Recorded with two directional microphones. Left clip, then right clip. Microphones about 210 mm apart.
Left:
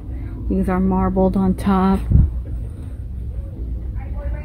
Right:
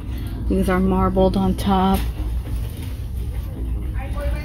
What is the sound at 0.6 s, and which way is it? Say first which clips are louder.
Speech: right 1 dB; 5° left (ahead or behind).